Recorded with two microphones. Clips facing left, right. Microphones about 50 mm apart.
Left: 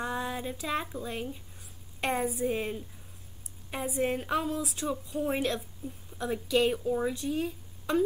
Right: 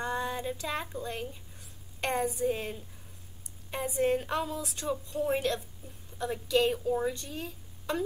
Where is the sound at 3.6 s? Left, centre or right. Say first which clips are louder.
Right 2 dB; centre.